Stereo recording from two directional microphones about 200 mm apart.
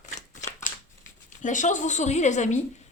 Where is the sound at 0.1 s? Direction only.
35° left (ahead or behind).